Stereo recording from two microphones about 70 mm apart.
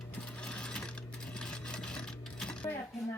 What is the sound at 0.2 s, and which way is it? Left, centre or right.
Sewing machine, centre.